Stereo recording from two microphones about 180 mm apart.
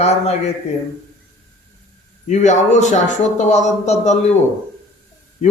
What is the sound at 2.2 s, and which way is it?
Speech, 40° left (ahead or behind).